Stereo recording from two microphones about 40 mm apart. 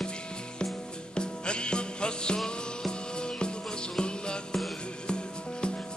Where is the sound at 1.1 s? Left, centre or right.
Left.